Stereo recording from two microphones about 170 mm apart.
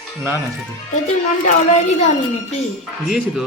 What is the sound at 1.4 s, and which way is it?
Speech, 40° left (ahead or behind).